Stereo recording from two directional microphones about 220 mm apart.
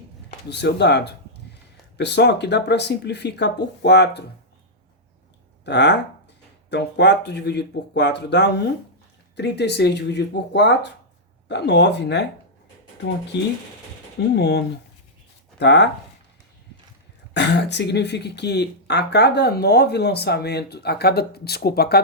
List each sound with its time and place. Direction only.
0.3 s speech: 50° left (ahead or behind)
5.6 s speech: 50° left (ahead or behind)
13.3 s speech: 50° left (ahead or behind)
17.3 s speech: 50° left (ahead or behind)